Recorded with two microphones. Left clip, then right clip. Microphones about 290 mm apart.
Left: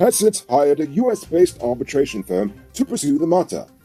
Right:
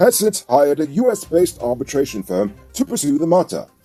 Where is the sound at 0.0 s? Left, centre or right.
Right.